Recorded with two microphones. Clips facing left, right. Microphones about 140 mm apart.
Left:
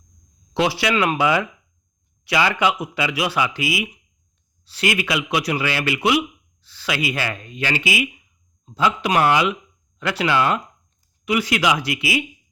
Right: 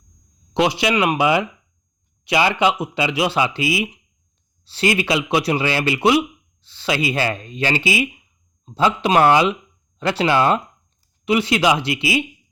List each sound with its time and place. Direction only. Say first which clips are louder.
0.5 s speech: right 2 dB; 20° right (ahead or behind)